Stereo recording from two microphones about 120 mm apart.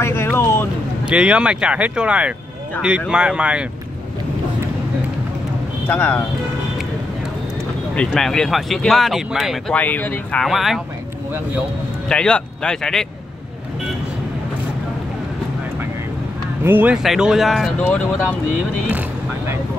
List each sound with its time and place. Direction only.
0.0 s vehicle: 20° left (ahead or behind)
1.0 s speech: 10° right (ahead or behind)
5.9 s speech: 15° left (ahead or behind)
7.9 s speech: 5° left (ahead or behind)
9.8 s speech: 15° left (ahead or behind)
10.4 s speech: centre (ahead or behind)
12.1 s speech: 10° left (ahead or behind)
16.6 s speech: 15° right (ahead or behind)
16.9 s speech: 5° right (ahead or behind)
18.9 s speech: 15° right (ahead or behind)